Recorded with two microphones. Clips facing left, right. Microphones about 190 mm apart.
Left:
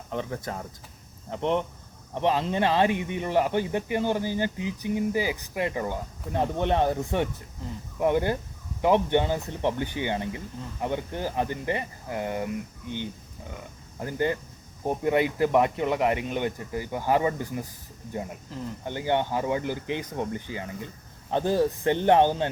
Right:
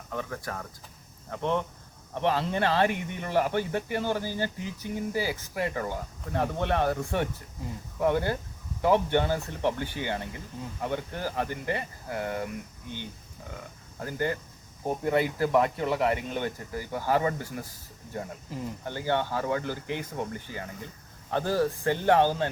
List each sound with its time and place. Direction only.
0.1 s speech: 20° left (ahead or behind)
14.0 s speech: 20° left (ahead or behind)